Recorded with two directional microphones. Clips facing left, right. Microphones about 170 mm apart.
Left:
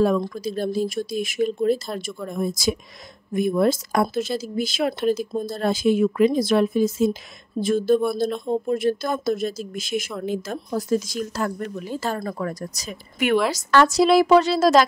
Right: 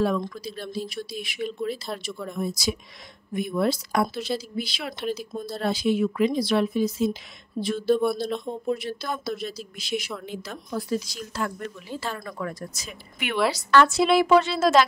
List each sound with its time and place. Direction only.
0.0 s speech: 45° left (ahead or behind)